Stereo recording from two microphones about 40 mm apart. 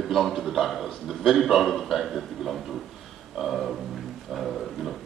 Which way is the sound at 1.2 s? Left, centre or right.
Centre.